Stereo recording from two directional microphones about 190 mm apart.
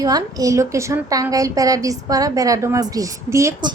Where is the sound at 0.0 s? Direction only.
20° right (ahead or behind).